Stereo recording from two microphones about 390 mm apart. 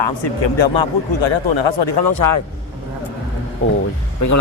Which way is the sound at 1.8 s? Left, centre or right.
Left.